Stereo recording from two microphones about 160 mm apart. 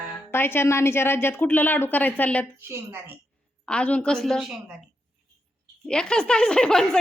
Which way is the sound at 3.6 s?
5° left (ahead or behind).